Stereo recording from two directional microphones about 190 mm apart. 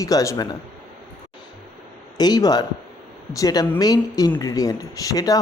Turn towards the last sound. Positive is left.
turn(degrees=20)  # may be behind; listen again after turning